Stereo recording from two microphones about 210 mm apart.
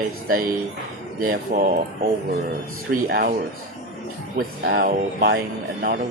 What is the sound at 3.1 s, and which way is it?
Speech, 45° right (ahead or behind).